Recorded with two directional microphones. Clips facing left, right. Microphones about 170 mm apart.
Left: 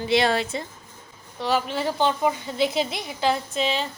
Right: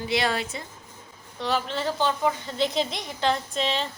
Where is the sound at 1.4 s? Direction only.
5° left (ahead or behind).